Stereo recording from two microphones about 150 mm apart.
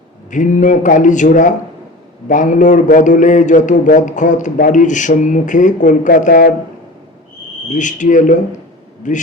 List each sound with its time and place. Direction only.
0.3 s a man's voice: 55° left (ahead or behind)
7.7 s a man's voice: 55° left (ahead or behind)